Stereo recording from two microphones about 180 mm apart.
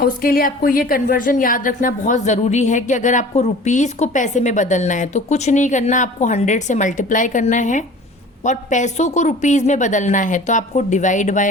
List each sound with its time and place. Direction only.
0.0 s a woman's voice: 55° left (ahead or behind)